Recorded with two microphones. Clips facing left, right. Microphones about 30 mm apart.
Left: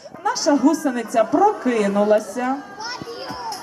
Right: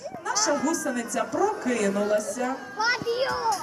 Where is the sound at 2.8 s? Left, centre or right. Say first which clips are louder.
Right 6 dB; right.